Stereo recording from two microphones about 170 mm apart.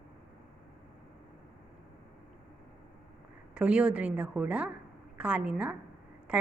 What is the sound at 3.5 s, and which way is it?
A woman's voice, 5° right (ahead or behind).